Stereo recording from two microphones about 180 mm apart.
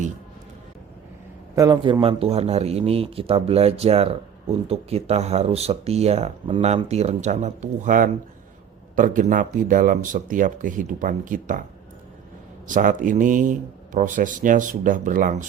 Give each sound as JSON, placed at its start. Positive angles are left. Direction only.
{"t": 1.5, "sound": "speech", "side_deg": -20}
{"t": 12.6, "sound": "speech", "side_deg": -45}